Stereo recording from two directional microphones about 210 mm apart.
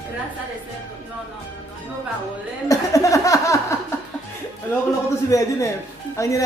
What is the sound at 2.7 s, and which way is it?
Speech, 15° left (ahead or behind).